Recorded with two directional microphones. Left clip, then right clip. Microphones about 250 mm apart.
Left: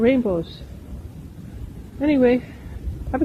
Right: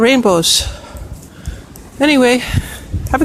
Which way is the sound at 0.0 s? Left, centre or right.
Right.